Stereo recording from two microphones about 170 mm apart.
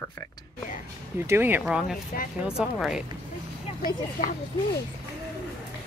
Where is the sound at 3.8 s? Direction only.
55° left (ahead or behind).